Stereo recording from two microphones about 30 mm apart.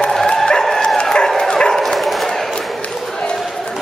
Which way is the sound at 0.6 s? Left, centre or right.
Centre.